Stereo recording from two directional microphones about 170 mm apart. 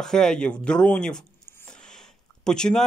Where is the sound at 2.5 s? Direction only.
5° left (ahead or behind).